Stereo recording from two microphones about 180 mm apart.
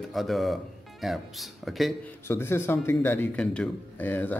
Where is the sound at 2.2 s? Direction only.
15° left (ahead or behind).